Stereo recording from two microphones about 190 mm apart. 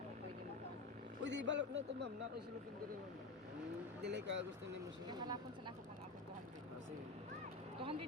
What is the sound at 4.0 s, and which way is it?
Speech, 65° right (ahead or behind).